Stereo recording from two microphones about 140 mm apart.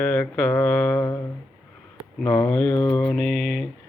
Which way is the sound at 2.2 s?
10° left (ahead or behind).